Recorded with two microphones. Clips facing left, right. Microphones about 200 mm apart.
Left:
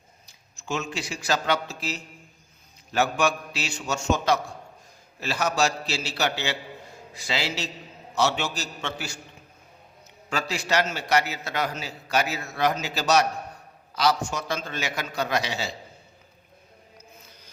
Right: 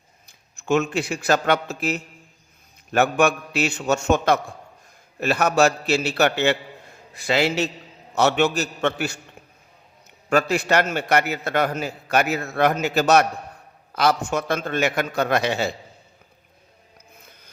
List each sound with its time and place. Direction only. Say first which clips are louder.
0.3 s a man's voice: right 10 dB; 55° right (ahead or behind)
10.2 s a man's voice: right 8 dB; 55° right (ahead or behind)